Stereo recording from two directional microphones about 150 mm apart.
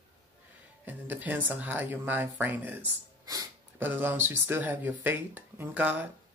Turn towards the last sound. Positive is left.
turn(degrees=-10)  # may be behind; listen again after turning